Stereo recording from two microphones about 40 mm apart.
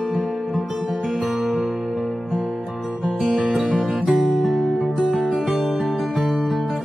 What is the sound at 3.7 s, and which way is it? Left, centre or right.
Music, right.